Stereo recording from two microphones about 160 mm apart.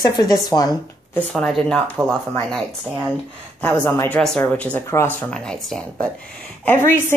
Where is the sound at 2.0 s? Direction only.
10° right (ahead or behind).